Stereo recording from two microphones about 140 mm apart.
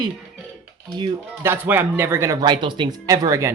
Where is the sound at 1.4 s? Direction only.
15° right (ahead or behind).